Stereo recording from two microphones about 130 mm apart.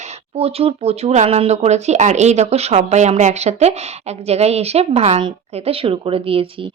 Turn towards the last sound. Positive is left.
turn(degrees=-45)  # may be behind; listen again after turning